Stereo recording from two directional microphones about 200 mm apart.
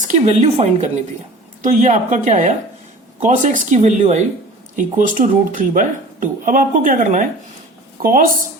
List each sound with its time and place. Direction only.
0.1 s speech: 35° right (ahead or behind)